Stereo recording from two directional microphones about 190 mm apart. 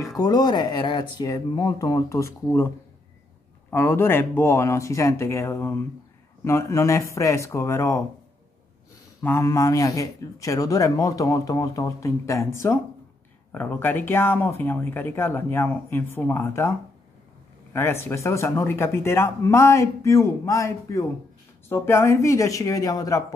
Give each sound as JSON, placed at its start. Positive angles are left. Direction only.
{"t": 0.2, "sound": "speech", "side_deg": 20}
{"t": 3.7, "sound": "a man's voice", "side_deg": 10}
{"t": 9.2, "sound": "a man's voice", "side_deg": 15}
{"t": 17.7, "sound": "a man's voice", "side_deg": 15}